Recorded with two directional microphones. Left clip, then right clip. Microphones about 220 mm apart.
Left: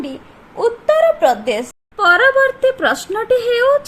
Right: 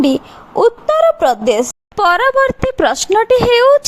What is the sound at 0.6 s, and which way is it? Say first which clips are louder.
A woman's voice: right 3 dB; 35° right (ahead or behind).